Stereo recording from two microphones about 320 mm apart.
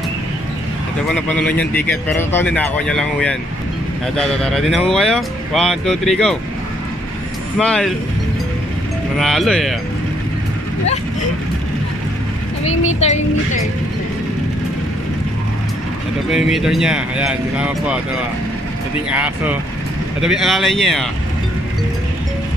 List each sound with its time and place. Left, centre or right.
1.1 s speech: centre
7.5 s speech: centre
9.2 s speech: centre
13.0 s speech: left
16.3 s speech: centre
19.0 s speech: centre